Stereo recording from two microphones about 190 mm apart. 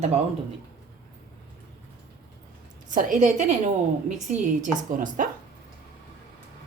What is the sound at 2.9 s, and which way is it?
A woman's voice, 40° right (ahead or behind).